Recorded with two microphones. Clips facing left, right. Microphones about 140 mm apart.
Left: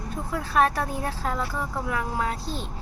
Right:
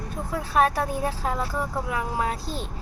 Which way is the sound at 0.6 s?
20° right (ahead or behind).